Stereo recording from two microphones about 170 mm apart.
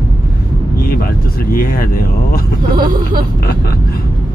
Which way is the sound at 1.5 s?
55° left (ahead or behind).